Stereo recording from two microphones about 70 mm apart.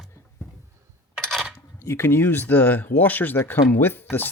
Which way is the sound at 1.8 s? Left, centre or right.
Left.